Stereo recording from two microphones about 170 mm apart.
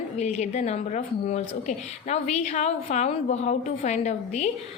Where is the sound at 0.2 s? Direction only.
40° left (ahead or behind).